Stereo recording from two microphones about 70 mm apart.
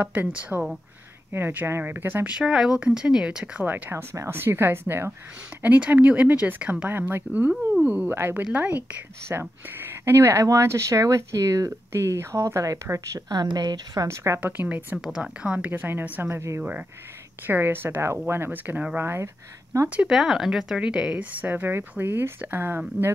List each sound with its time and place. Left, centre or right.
0.0 s speech: right
2.2 s a woman's voice: centre
3.6 s speech: right
3.9 s speech: right
5.6 s speech: right
6.9 s speech: right
8.1 s speech: right
13.3 s speech: right
14.0 s speech: right
14.4 s speech: right
15.0 s speech: centre
15.4 s a woman's voice: centre
15.7 s speech: right
20.1 s a woman's voice: centre; by 22.8 s right